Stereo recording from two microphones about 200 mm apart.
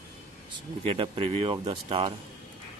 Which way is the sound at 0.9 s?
25° right (ahead or behind).